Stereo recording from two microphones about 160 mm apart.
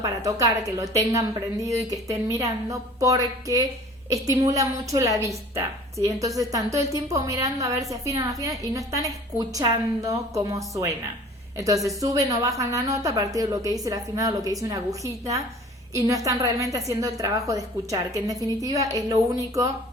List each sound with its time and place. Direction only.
0.0 s a woman's voice: 20° right (ahead or behind)